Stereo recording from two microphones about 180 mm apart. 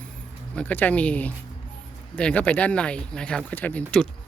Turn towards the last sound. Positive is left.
turn(degrees=5)  # may be behind; listen again after turning